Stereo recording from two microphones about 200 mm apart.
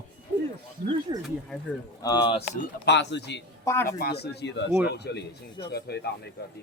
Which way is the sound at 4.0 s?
55° left (ahead or behind).